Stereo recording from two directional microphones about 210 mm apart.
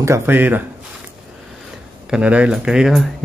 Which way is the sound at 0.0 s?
10° right (ahead or behind).